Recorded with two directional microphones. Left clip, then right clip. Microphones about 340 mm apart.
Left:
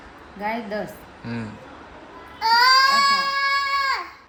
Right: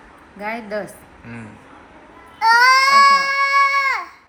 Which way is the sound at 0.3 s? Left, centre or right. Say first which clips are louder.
Right 1 dB; centre.